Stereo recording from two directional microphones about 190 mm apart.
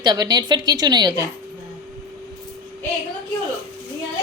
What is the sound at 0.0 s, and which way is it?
A woman's voice, 20° right (ahead or behind).